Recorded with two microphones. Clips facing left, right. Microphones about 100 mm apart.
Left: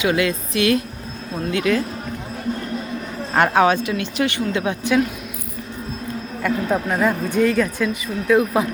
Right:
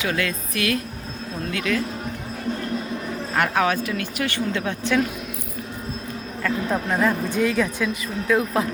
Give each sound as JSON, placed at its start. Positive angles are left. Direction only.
{"t": 0.0, "sound": "a woman's voice", "side_deg": 20}
{"t": 3.3, "sound": "a woman's voice", "side_deg": 30}
{"t": 6.7, "sound": "speech", "side_deg": 5}
{"t": 7.4, "sound": "a woman's voice", "side_deg": -5}